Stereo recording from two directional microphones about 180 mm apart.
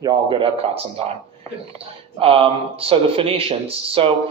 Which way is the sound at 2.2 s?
30° right (ahead or behind).